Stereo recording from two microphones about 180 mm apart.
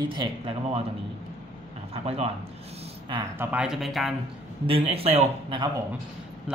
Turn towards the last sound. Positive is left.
turn(degrees=-30)  # may be behind; listen again after turning